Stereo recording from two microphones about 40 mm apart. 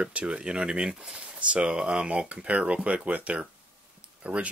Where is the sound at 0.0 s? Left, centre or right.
Right.